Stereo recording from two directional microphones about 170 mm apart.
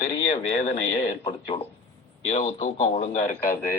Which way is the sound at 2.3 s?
40° left (ahead or behind).